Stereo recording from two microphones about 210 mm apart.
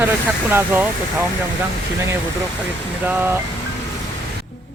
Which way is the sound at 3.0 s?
10° right (ahead or behind).